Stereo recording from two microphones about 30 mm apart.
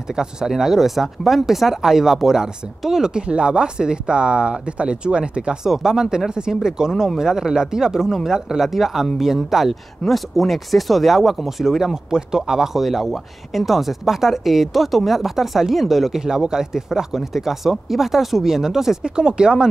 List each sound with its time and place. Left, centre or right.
0.1 s speech: right
3.2 s speech: right
5.6 s speech: centre
10.0 s speech: centre
11.8 s speech: right
12.8 s speech: centre
16.3 s speech: right
19.0 s speech: right